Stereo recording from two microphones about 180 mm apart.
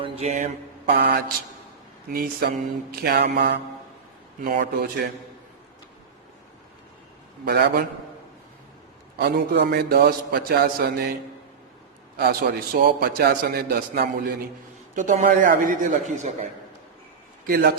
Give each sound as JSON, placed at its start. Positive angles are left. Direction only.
{"t": 0.0, "sound": "mantra", "side_deg": -35}
{"t": 0.9, "sound": "a man's voice", "side_deg": -65}
{"t": 4.4, "sound": "a man's voice", "side_deg": -50}
{"t": 7.4, "sound": "a man's voice", "side_deg": -60}
{"t": 9.1, "sound": "a man's voice", "side_deg": -60}
{"t": 14.9, "sound": "speech", "side_deg": -45}
{"t": 17.4, "sound": "a man's voice", "side_deg": -60}